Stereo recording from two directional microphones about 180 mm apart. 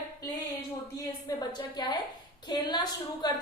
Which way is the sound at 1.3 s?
25° left (ahead or behind).